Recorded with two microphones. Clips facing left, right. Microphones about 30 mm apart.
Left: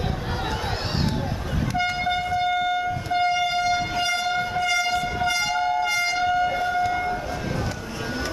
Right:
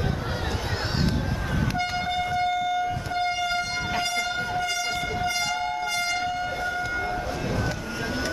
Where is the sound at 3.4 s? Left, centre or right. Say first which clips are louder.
Left 4 dB; centre.